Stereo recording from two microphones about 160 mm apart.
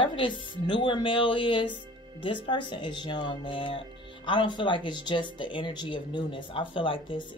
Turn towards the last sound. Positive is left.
turn(degrees=35)  # may be behind; listen again after turning